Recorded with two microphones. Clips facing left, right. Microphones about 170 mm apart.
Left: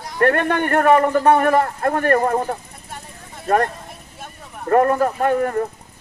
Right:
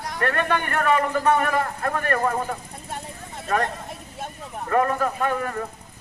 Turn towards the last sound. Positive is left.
turn(degrees=40)  # may be behind; listen again after turning